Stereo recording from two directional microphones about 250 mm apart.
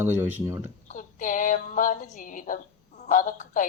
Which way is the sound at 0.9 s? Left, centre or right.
Left.